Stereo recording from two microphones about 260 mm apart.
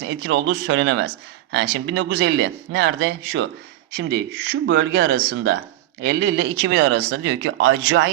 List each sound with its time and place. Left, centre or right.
0.3 s speech: right